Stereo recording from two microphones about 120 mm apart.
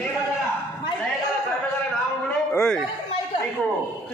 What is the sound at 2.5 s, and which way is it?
Chatter, 20° left (ahead or behind).